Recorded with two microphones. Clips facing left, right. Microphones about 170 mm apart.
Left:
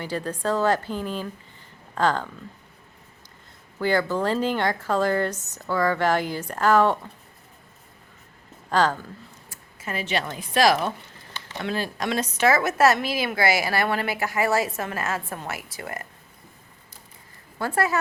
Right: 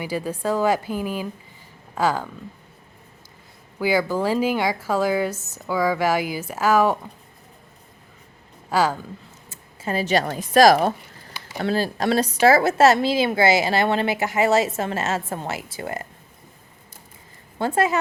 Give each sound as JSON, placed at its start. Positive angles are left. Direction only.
{"t": 0.0, "sound": "speech", "side_deg": -10}
{"t": 3.8, "sound": "speech", "side_deg": -10}
{"t": 8.7, "sound": "speech", "side_deg": -10}
{"t": 9.5, "sound": "a woman's voice", "side_deg": -30}
{"t": 17.6, "sound": "a woman's voice", "side_deg": -20}